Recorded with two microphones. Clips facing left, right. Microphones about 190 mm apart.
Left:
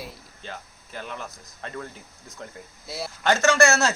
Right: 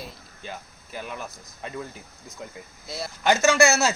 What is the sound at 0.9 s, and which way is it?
Speech, 10° right (ahead or behind).